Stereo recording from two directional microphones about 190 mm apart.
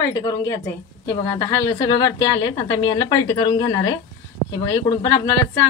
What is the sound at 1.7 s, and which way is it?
A woman's voice, 20° left (ahead or behind).